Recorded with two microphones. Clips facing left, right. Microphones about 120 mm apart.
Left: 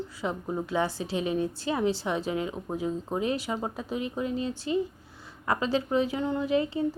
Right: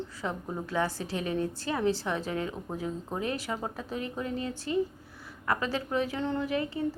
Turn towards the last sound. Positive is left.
turn(degrees=20)  # may be behind; listen again after turning